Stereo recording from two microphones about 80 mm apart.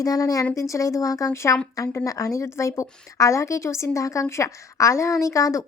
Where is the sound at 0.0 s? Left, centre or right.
Left.